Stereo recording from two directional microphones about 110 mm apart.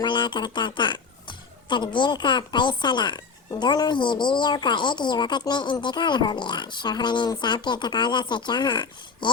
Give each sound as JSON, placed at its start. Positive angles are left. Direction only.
{"t": 0.0, "sound": "a woman's voice", "side_deg": 45}